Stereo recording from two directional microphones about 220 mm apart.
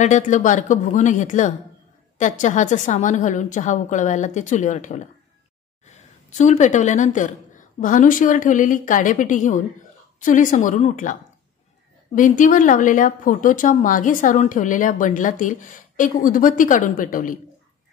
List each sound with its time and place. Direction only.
0.0 s speech: 35° left (ahead or behind)
12.2 s speech: 35° left (ahead or behind)